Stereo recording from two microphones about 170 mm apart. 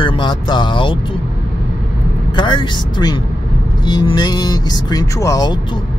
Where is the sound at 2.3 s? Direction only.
25° left (ahead or behind).